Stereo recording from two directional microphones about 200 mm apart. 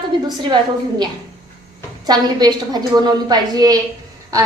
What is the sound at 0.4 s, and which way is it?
Speech, 20° right (ahead or behind).